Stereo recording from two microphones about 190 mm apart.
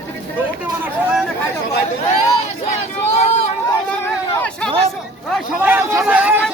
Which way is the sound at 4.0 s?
10° left (ahead or behind).